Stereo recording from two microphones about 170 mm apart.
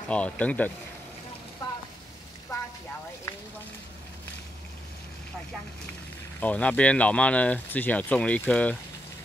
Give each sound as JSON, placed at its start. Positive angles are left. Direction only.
{"t": 0.1, "sound": "speech", "side_deg": 10}
{"t": 1.6, "sound": "vehicle", "side_deg": 25}
{"t": 6.4, "sound": "speech", "side_deg": 10}